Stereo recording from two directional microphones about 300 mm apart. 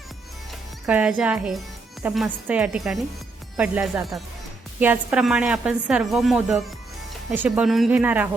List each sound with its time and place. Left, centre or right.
0.9 s speech: centre